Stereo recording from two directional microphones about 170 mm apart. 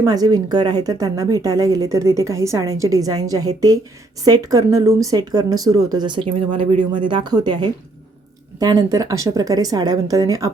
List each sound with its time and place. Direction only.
0.0 s speech: 20° right (ahead or behind)